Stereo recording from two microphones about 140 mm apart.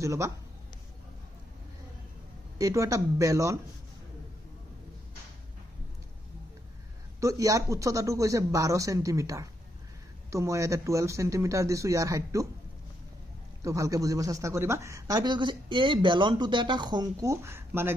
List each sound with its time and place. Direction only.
0.0 s speech: 20° right (ahead or behind)
2.6 s speech: 25° right (ahead or behind)
7.2 s speech: 25° right (ahead or behind)
13.7 s speech: 25° right (ahead or behind)